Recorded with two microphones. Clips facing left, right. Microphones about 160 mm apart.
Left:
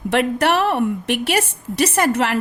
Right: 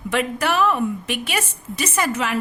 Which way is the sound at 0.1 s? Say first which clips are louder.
Left 4 dB; 70° left (ahead or behind).